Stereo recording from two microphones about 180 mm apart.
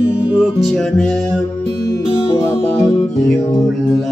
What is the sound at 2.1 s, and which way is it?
Music, 30° left (ahead or behind).